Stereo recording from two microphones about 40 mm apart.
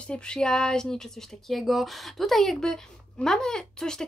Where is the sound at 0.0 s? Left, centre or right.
Left.